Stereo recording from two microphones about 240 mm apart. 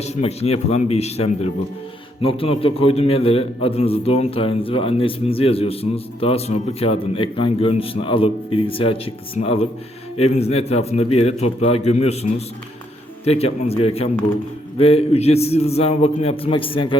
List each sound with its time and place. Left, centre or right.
0.0 s a man's voice: left